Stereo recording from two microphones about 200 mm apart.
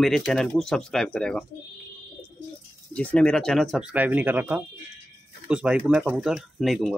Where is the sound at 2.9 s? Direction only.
5° left (ahead or behind).